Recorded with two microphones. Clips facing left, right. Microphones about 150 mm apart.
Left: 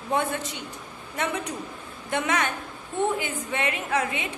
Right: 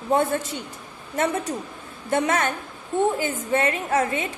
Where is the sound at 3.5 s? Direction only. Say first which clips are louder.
Right 5 dB; 45° right (ahead or behind).